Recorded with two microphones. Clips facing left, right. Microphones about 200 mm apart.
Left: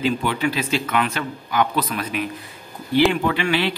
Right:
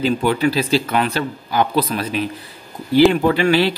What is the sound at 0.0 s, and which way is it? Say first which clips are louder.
A man's voice: right 4 dB; 40° right (ahead or behind).